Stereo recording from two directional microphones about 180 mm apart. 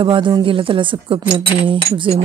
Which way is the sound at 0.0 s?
25° right (ahead or behind).